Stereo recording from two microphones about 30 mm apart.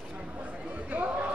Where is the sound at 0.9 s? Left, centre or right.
Right.